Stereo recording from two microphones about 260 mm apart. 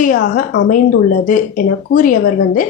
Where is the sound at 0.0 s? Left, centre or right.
Left.